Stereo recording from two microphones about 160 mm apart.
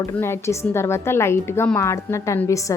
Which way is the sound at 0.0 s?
15° left (ahead or behind).